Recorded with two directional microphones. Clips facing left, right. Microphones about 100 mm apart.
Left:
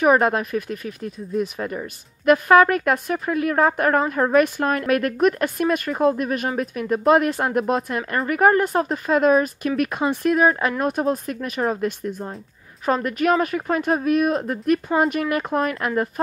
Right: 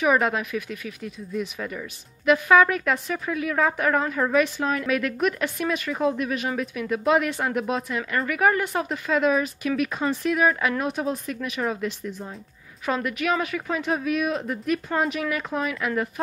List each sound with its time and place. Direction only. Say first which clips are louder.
0.0 s speech: left 4 dB; 45° left (ahead or behind)
10.2 s speech: left 4 dB; 35° left (ahead or behind)
10.8 s speech: left 5 dB; 45° left (ahead or behind)